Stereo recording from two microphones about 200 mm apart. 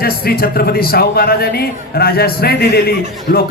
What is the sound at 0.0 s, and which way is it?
Speech, 50° left (ahead or behind).